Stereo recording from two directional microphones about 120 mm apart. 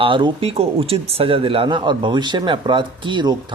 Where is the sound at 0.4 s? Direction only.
55° right (ahead or behind).